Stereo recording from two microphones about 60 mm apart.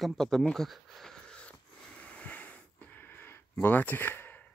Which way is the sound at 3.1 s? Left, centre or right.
Left.